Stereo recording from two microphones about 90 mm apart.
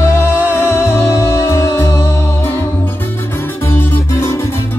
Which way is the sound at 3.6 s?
25° left (ahead or behind).